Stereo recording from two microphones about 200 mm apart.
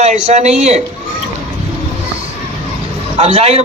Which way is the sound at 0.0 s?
35° right (ahead or behind).